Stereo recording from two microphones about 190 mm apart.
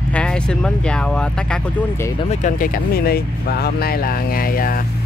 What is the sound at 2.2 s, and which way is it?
Speech, 35° left (ahead or behind).